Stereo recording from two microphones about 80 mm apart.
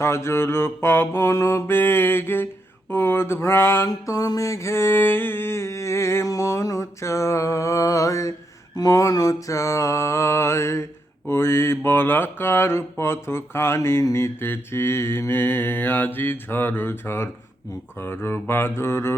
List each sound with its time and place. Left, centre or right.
0.0 s mantra: left
3.8 s mantra: left